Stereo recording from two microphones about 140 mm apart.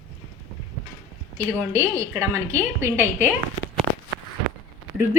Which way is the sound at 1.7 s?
20° right (ahead or behind).